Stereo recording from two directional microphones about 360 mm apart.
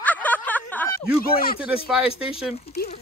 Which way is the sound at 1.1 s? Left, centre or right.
Left.